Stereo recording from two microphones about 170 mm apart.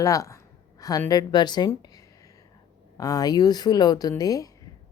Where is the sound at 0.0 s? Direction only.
20° left (ahead or behind).